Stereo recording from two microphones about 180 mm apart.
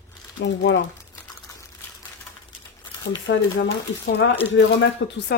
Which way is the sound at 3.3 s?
75° left (ahead or behind).